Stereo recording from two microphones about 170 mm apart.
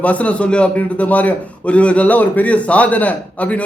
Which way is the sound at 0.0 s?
10° left (ahead or behind).